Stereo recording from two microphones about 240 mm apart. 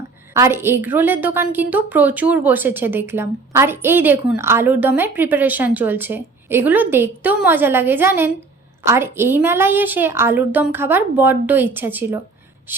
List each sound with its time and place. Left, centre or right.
0.3 s a woman's voice: centre